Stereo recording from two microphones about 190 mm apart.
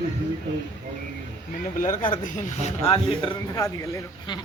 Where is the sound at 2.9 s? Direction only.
30° left (ahead or behind).